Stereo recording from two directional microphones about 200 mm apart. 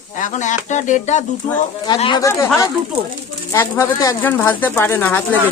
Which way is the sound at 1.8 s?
25° left (ahead or behind).